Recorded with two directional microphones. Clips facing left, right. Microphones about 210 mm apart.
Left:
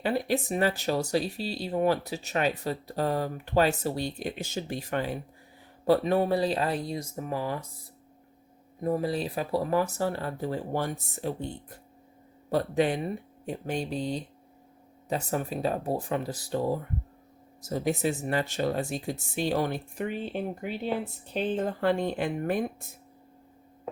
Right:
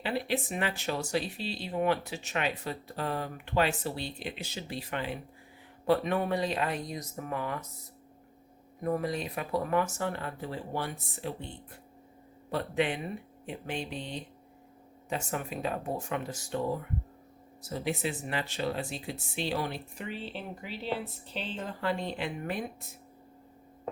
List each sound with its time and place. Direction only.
0.0 s speech: 40° left (ahead or behind)
8.8 s speech: 30° left (ahead or behind); by 22.6 s 45° left (ahead or behind)